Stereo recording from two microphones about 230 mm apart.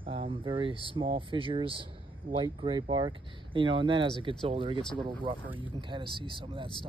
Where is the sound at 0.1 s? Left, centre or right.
Right.